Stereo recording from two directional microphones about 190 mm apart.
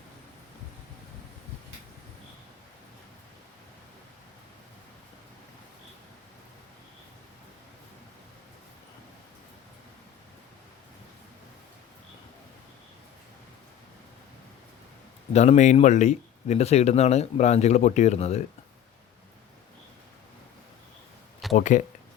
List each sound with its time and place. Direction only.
15.3 s speech: 35° left (ahead or behind)
21.5 s speech: 40° left (ahead or behind)